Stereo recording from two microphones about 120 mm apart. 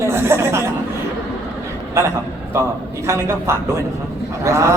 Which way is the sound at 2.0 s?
25° right (ahead or behind).